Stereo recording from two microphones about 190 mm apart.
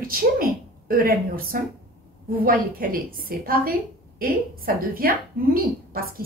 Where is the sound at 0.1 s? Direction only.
50° right (ahead or behind).